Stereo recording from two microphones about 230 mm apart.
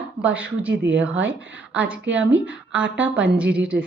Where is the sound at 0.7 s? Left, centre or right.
Right.